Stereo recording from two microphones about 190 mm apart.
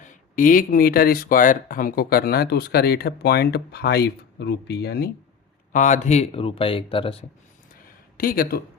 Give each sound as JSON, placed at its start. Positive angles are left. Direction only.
{"t": 0.0, "sound": "speech", "side_deg": 45}
{"t": 5.7, "sound": "speech", "side_deg": 40}
{"t": 7.7, "sound": "a sound", "side_deg": 50}